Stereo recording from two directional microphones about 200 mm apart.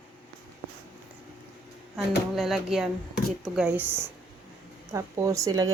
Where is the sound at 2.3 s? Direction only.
Centre (ahead or behind); by 5.7 s 15° right (ahead or behind).